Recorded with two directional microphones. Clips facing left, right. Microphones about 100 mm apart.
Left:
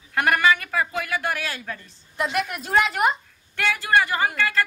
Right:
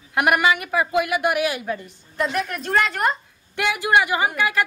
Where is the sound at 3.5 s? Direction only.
15° right (ahead or behind).